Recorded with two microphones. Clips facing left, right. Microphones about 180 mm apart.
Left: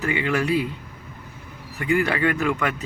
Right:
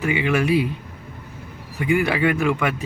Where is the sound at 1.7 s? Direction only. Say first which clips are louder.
Right 2 dB; 10° right (ahead or behind).